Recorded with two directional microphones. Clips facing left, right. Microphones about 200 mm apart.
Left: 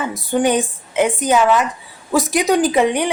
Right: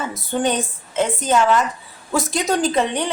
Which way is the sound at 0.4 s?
15° left (ahead or behind).